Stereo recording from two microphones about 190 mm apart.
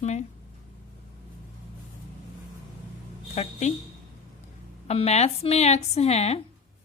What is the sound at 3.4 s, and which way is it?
Speech, 35° left (ahead or behind).